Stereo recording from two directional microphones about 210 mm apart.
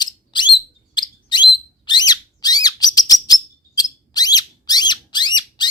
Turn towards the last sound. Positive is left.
turn(degrees=20)  # may be behind; listen again after turning